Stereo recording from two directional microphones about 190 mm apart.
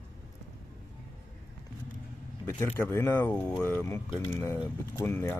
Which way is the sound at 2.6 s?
10° left (ahead or behind).